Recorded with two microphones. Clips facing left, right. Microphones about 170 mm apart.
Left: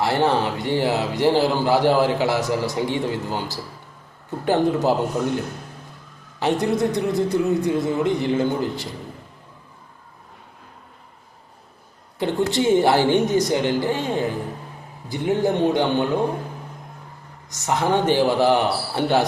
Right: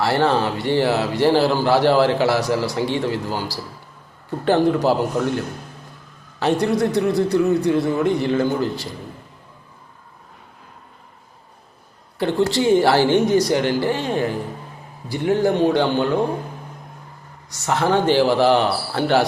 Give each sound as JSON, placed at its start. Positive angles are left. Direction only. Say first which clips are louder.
{"t": 0.0, "sound": "a man's voice", "louder": "right 1 dB", "side_deg": 15}
{"t": 6.4, "sound": "a man's voice", "louder": "right 2 dB", "side_deg": 20}
{"t": 12.2, "sound": "a man's voice", "louder": "right 2 dB", "side_deg": 20}
{"t": 15.1, "sound": "a man's voice", "louder": "right 2 dB", "side_deg": 20}
{"t": 17.5, "sound": "a man's voice", "louder": "right 2 dB", "side_deg": 20}